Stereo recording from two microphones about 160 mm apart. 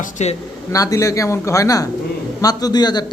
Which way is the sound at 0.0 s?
45° left (ahead or behind).